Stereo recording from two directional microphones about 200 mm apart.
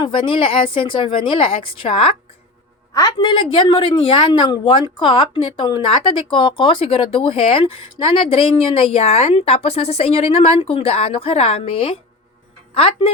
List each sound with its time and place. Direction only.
0.0 s a woman's voice: 25° left (ahead or behind)